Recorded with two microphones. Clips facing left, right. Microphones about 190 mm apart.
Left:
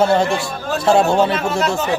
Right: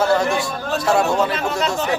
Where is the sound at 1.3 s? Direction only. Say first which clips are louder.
Left 3 dB; centre (ahead or behind).